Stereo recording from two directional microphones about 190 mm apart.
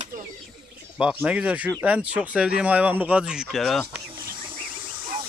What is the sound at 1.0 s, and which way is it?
Speech, 5° right (ahead or behind).